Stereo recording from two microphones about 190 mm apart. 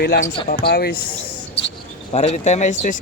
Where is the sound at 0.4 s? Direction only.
55° left (ahead or behind).